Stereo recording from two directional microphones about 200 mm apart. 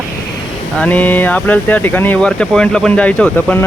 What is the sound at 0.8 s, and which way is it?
Speech, 10° left (ahead or behind).